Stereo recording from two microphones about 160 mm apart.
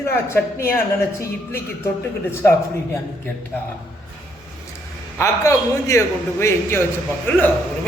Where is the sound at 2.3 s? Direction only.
15° left (ahead or behind).